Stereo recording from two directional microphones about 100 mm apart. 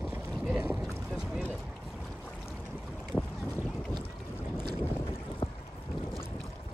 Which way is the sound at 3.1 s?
5° left (ahead or behind).